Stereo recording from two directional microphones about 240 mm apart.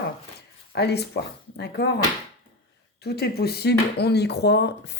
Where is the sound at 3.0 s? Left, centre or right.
Left.